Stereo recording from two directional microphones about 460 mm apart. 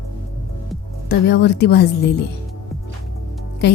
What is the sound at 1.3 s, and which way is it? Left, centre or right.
Speech, left.